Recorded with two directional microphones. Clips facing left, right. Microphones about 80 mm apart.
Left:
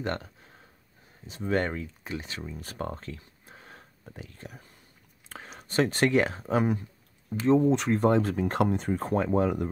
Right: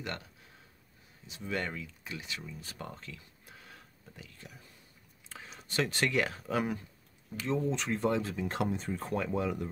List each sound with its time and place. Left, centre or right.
0.0 s speech: left
5.3 s speech: left
7.3 s speech: left
7.6 s speech: left
8.9 s speech: left